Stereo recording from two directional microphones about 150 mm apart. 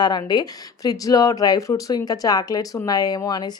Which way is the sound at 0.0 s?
30° left (ahead or behind).